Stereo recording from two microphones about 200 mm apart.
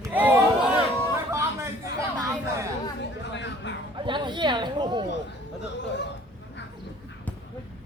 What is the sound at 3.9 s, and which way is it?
Chatter, 25° right (ahead or behind).